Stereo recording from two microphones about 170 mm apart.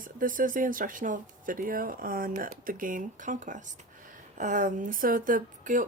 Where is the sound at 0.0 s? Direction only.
55° right (ahead or behind).